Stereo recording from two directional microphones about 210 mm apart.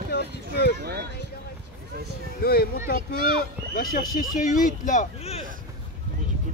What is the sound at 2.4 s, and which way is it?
Speech, 45° left (ahead or behind).